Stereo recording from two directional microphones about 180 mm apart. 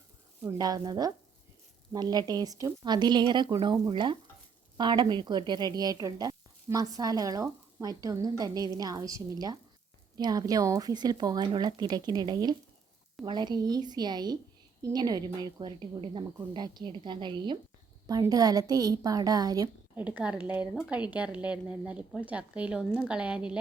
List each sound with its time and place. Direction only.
0.4 s a woman's voice: 20° right (ahead or behind)
20.0 s a woman's voice: 10° right (ahead or behind)